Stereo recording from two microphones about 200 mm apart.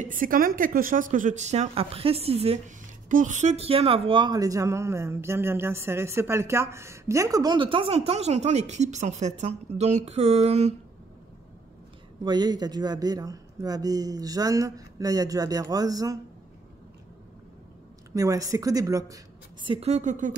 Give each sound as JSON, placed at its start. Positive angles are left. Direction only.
{"t": 0.0, "sound": "a woman's voice", "side_deg": -45}
{"t": 12.3, "sound": "speech", "side_deg": -20}
{"t": 18.1, "sound": "a woman's voice", "side_deg": -15}